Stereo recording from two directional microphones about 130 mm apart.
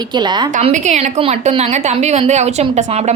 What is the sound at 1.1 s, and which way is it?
A woman's voice, 45° right (ahead or behind).